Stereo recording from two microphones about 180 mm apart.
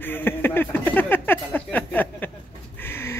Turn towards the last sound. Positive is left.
turn(degrees=10)  # may be behind; listen again after turning